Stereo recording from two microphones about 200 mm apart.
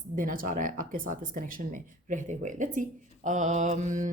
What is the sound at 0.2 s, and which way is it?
Speech, 40° right (ahead or behind).